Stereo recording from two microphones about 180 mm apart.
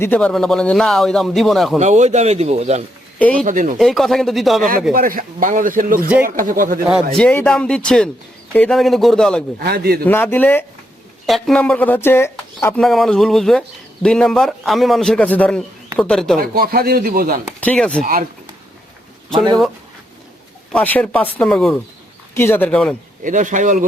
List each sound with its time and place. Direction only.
0.0 s speech: 10° left (ahead or behind)
1.8 s a man's voice: 40° right (ahead or behind)
3.3 s speech: 50° right (ahead or behind)
3.8 s speech: centre (ahead or behind)
4.9 s speech: 50° right (ahead or behind)
7.2 s speech: 5° left (ahead or behind)
9.6 s a man's voice: 60° right (ahead or behind)
10.0 s speech: 10° left (ahead or behind)
16.4 s speech: 55° right (ahead or behind)
17.6 s speech: 5° left (ahead or behind)
18.0 s speech: 50° right (ahead or behind)
20.7 s speech: 10° left (ahead or behind)
23.2 s speech: 45° right (ahead or behind)